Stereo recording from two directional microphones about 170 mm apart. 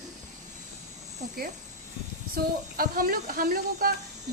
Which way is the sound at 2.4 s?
55° right (ahead or behind).